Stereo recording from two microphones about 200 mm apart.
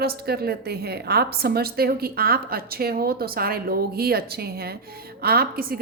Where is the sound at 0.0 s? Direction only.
50° right (ahead or behind).